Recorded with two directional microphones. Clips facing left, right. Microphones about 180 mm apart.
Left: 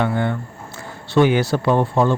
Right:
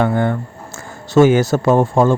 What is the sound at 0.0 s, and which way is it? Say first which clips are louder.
Speech: right 4 dB; 45° right (ahead or behind).